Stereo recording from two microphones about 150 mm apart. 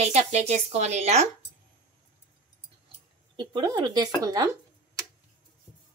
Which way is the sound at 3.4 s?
30° right (ahead or behind).